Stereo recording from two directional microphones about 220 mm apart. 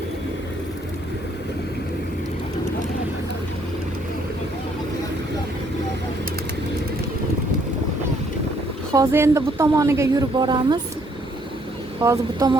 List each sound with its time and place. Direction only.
8.9 s speech: 15° right (ahead or behind)
11.9 s speech: 15° right (ahead or behind)